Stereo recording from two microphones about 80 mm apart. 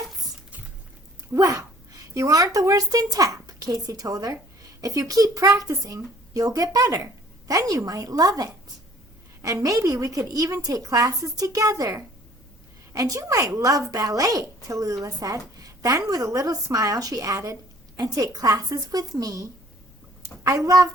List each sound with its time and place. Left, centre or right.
1.3 s a woman's voice: right